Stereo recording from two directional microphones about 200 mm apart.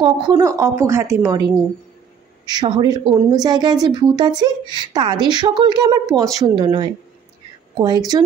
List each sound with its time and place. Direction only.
0.0 s a woman's voice: 20° right (ahead or behind)
2.5 s a woman's voice: 20° right (ahead or behind)